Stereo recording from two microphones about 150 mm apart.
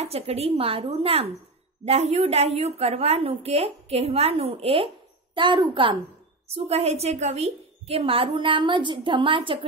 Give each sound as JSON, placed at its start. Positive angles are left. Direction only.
{"t": 0.0, "sound": "a woman's voice", "side_deg": -45}
{"t": 6.5, "sound": "a woman's voice", "side_deg": -45}